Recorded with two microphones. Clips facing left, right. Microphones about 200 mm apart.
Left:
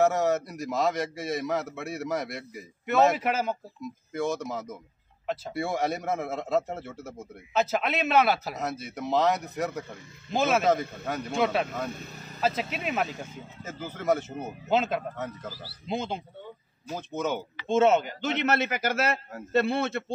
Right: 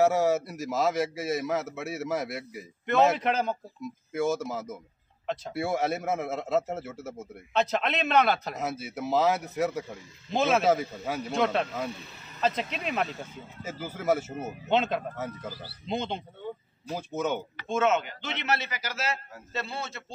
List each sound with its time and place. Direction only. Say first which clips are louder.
0.0 s speech: right 1 dB; 5° right (ahead or behind)
13.2 s speech: even; 10° right (ahead or behind)
17.6 s a man's voice: left 4 dB; 30° left (ahead or behind); by 20.1 s 60° left (ahead or behind)